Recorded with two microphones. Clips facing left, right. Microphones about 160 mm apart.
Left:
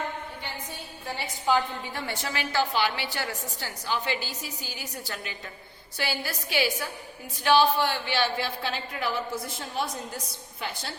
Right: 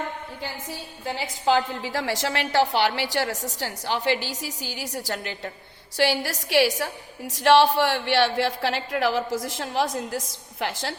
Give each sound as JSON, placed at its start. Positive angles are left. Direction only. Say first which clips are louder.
{"t": 0.7, "sound": "a woman's voice", "louder": "right 5 dB", "side_deg": -90}